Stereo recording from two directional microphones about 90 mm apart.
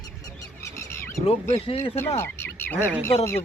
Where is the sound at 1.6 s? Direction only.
90° left.